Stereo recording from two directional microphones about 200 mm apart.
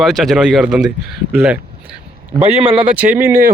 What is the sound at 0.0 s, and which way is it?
Speech, centre (ahead or behind).